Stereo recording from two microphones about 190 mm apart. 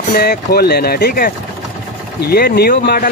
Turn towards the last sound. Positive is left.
turn(degrees=50)  # may be behind; listen again after turning